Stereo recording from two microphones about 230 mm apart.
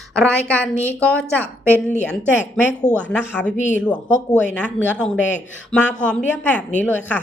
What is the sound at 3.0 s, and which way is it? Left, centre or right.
Speech, centre.